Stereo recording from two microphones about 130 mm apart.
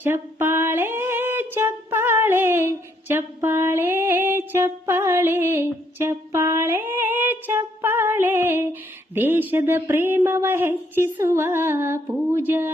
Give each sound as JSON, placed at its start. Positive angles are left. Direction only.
{"t": 0.0, "sound": "female singing", "side_deg": -20}
{"t": 9.1, "sound": "speech", "side_deg": -15}